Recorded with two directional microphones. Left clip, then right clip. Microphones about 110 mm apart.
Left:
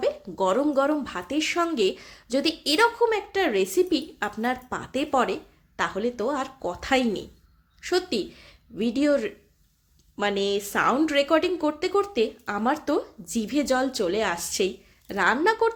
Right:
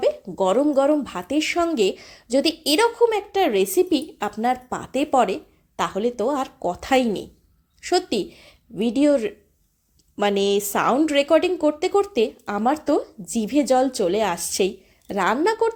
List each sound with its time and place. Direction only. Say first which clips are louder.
0.0 s a woman's voice: right 4 dB; 30° right (ahead or behind)